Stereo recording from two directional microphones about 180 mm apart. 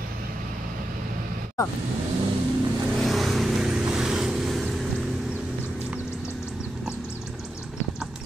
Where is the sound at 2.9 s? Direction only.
Centre (ahead or behind).